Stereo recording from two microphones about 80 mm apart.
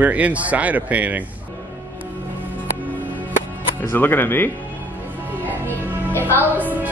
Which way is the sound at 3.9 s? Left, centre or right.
Left.